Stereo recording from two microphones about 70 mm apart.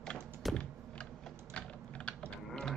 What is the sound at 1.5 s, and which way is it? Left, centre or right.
Typing, centre.